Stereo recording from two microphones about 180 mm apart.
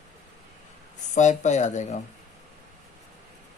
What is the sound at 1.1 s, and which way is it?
Speech, 40° left (ahead or behind).